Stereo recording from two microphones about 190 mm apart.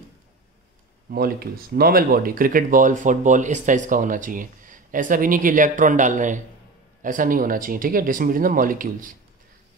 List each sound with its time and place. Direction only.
1.1 s speech: 50° right (ahead or behind)